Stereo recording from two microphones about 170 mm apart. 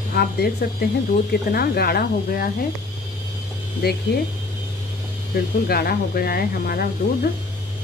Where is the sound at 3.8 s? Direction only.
65° left (ahead or behind).